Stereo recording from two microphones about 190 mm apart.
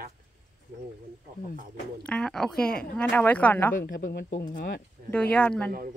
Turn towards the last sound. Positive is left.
turn(degrees=5)  # may be behind; listen again after turning